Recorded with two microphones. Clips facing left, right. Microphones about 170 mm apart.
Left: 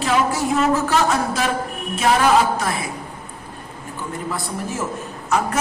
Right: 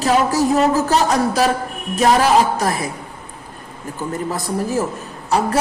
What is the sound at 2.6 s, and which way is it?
Speech, 40° right (ahead or behind).